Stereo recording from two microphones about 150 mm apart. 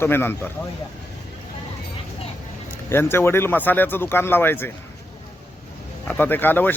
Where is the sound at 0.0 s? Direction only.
15° left (ahead or behind).